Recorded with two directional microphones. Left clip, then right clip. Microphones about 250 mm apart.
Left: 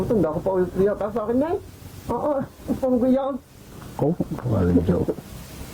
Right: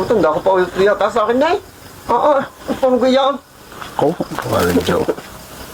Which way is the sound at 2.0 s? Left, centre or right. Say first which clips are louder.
Right 11 dB; right.